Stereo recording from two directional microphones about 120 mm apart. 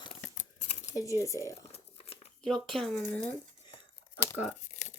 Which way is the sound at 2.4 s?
Centre (ahead or behind).